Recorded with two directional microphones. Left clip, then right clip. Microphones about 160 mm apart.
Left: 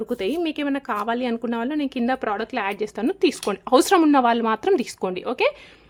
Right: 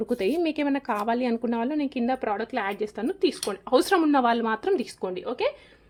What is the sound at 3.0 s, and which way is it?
Speech, 30° left (ahead or behind).